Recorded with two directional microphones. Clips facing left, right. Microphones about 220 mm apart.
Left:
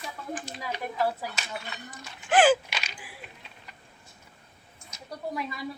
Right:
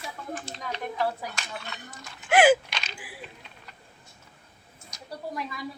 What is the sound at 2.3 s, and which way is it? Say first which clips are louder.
Gasp: right 2 dB; 10° right (ahead or behind).